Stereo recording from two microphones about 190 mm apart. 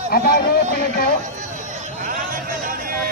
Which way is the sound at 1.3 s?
40° right (ahead or behind).